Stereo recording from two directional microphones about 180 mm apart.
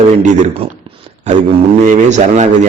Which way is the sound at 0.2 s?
35° right (ahead or behind).